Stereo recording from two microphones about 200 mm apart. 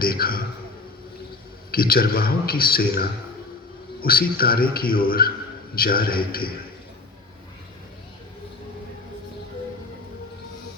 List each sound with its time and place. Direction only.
0.0 s speech: 50° left (ahead or behind)
1.7 s speech: 50° left (ahead or behind)